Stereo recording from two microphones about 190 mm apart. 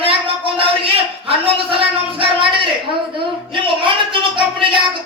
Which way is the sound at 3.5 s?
25° right (ahead or behind).